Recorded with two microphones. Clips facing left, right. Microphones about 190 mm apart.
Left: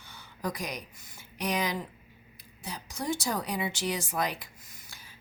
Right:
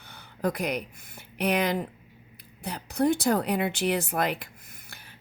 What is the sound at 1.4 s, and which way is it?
A woman's voice, 60° right (ahead or behind).